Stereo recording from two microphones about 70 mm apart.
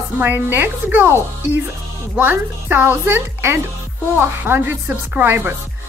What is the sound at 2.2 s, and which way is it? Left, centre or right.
A child's voice, right.